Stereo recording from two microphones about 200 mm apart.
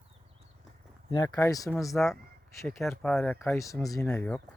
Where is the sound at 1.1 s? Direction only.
20° left (ahead or behind).